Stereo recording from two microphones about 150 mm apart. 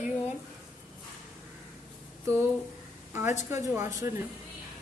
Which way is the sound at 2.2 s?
20° right (ahead or behind).